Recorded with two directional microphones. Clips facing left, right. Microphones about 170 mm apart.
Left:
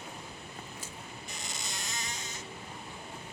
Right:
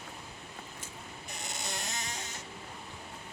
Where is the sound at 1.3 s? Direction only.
60° right (ahead or behind).